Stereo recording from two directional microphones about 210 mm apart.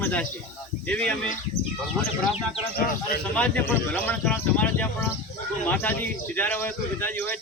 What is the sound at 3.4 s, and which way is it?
A man's voice, 5° left (ahead or behind).